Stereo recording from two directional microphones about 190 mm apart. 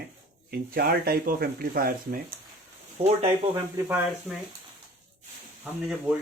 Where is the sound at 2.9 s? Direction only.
30° right (ahead or behind).